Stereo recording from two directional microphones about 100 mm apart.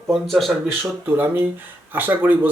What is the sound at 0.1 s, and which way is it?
Speech, centre (ahead or behind).